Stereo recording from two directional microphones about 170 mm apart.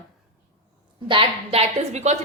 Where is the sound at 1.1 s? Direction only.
35° right (ahead or behind).